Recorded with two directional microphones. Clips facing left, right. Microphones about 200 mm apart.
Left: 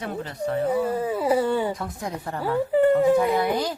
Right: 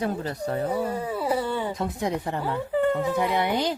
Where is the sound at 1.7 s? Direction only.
20° right (ahead or behind).